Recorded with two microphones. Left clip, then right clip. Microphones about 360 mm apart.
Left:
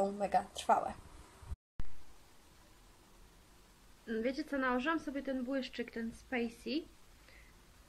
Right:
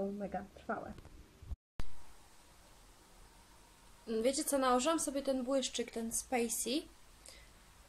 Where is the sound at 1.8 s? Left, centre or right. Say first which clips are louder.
Right 6 dB; centre.